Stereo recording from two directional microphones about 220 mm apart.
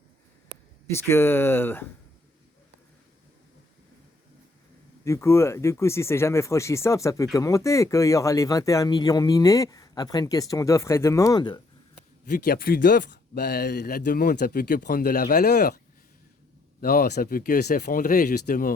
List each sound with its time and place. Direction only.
0.9 s speech: 10° left (ahead or behind)
5.0 s speech: 15° left (ahead or behind)
12.3 s speech: 40° left (ahead or behind)
16.8 s speech: 45° left (ahead or behind)